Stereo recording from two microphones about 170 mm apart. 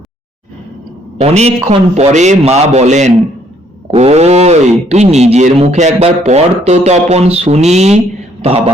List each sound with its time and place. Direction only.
1.2 s speech: 40° right (ahead or behind)